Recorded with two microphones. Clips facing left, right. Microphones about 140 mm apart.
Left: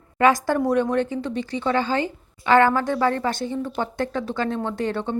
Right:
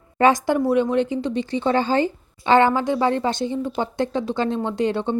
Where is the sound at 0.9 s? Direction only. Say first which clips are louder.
Right 2 dB; 15° right (ahead or behind).